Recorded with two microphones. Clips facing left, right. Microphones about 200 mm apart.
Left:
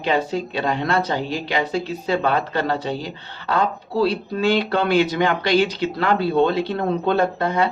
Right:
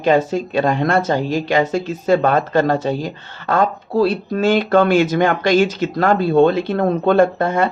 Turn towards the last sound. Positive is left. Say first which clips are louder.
# right 4 dB
turn(degrees=-50)  # may be behind; listen again after turning